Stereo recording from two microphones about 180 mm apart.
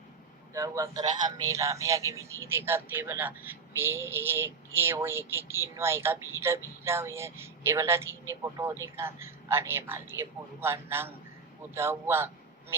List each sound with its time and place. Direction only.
0.5 s speech: 20° right (ahead or behind)